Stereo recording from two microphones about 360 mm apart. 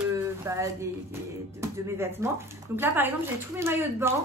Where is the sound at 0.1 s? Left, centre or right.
Centre.